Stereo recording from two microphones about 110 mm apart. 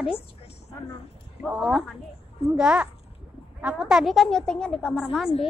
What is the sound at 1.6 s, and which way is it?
A woman's voice, 5° right (ahead or behind).